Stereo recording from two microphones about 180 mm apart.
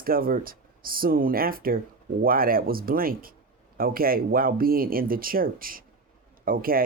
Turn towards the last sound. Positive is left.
turn(degrees=-55)  # may be behind; listen again after turning